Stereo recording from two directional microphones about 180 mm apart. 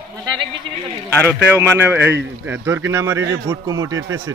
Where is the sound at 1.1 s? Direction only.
15° left (ahead or behind).